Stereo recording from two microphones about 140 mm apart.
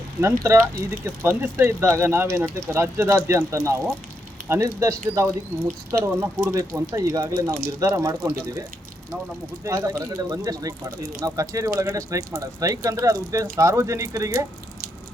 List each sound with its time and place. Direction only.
0.2 s speech: 20° right (ahead or behind)
9.6 s speech: 25° right (ahead or behind)